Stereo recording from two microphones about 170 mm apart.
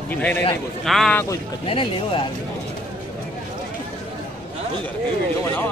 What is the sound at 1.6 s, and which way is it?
Speech, 30° left (ahead or behind).